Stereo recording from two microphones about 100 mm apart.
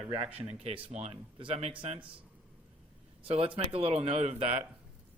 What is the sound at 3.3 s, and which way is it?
Speech, 70° right (ahead or behind).